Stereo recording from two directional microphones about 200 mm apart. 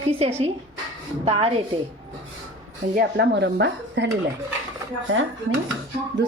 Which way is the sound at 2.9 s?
60° right (ahead or behind).